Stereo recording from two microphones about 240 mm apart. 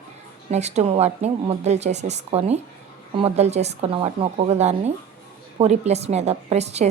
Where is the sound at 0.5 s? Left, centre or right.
Right.